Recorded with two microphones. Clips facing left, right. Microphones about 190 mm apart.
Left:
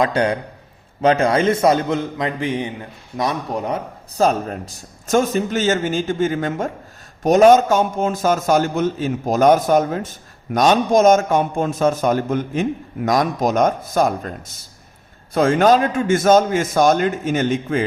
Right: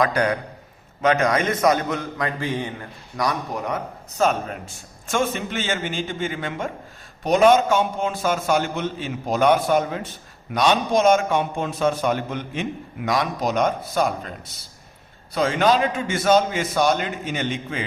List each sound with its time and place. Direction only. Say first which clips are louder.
0.0 s a man's voice: left 3 dB; 25° left (ahead or behind); by 17.8 s 45° left (ahead or behind)